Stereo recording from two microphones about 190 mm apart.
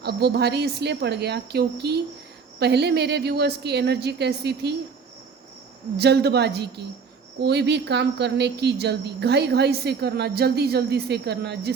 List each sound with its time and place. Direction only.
0.0 s a woman's voice: 60° right (ahead or behind)
6.0 s a woman's voice: 60° right (ahead or behind)